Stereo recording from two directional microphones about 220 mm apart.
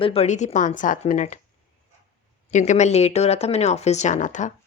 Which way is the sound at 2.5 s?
35° left (ahead or behind).